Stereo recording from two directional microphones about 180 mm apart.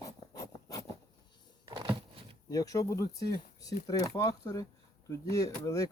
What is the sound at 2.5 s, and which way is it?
Speech, 20° left (ahead or behind).